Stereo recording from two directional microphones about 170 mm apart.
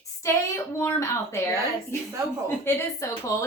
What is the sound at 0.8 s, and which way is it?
Speech, 15° left (ahead or behind).